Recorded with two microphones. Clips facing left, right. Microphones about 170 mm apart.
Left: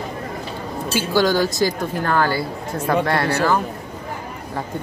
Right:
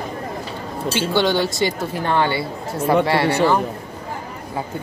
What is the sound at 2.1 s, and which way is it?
Speech, 25° right (ahead or behind).